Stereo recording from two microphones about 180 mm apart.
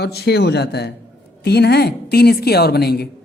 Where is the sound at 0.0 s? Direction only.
65° left (ahead or behind).